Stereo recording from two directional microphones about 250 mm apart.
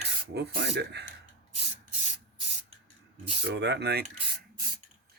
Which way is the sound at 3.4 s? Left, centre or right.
Right.